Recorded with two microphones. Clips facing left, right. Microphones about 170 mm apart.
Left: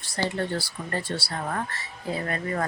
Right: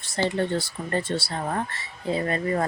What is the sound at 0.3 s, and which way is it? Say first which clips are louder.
Speech: right 3 dB; 20° right (ahead or behind).